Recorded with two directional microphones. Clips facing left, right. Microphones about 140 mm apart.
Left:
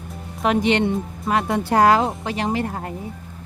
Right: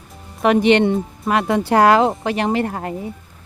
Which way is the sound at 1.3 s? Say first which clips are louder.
Right 3 dB; 85° right.